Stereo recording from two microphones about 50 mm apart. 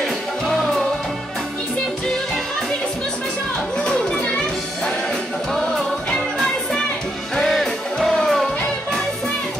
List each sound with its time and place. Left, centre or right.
0.0 s music: centre
3.8 s children playing: centre
6.0 s music: centre